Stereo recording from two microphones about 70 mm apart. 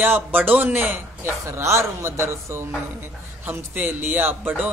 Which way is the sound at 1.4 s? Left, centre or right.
Right.